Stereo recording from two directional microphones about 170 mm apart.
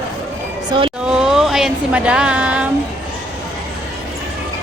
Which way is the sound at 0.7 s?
30° right (ahead or behind).